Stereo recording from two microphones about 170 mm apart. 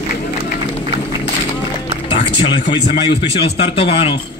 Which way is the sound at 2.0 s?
30° left (ahead or behind).